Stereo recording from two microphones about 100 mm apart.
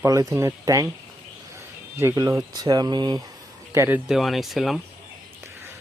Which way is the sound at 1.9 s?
25° right (ahead or behind).